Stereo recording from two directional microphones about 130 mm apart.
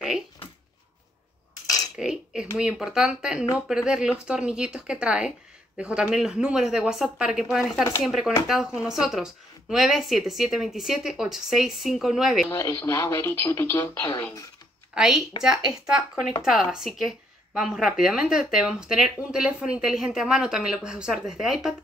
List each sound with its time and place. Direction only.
2.0 s a woman's voice: 5° right (ahead or behind)
12.4 s speech: 25° left (ahead or behind)
15.0 s a woman's voice: 5° right (ahead or behind)